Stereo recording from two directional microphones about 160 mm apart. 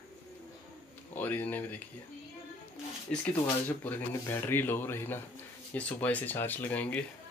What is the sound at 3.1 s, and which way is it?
Speech, 10° left (ahead or behind).